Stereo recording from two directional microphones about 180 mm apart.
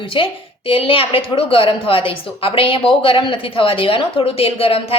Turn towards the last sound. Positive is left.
turn(degrees=30)  # may be behind; listen again after turning